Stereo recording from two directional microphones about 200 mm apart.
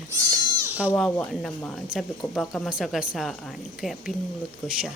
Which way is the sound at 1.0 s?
5° left (ahead or behind).